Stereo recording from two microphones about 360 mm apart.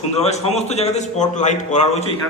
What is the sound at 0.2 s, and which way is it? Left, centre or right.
A man's voice, centre.